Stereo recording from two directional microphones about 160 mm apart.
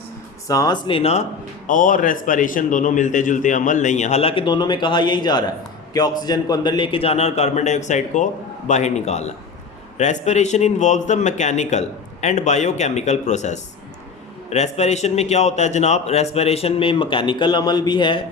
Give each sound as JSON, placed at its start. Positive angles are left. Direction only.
{"t": 0.4, "sound": "a man's voice", "side_deg": 20}